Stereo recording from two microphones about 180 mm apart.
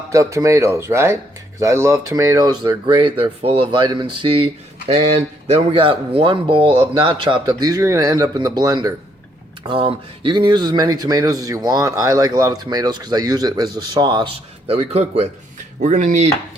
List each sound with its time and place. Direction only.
0.1 s speech: 15° right (ahead or behind)
14.7 s speech: 35° right (ahead or behind)